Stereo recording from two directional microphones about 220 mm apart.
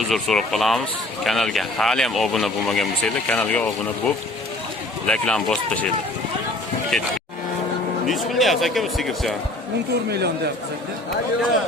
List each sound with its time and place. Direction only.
0.1 s speech: centre (ahead or behind)
6.9 s speech: centre (ahead or behind)
10.1 s a man's voice: 45° right (ahead or behind)